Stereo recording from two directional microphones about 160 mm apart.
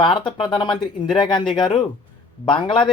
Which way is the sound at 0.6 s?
30° left (ahead or behind).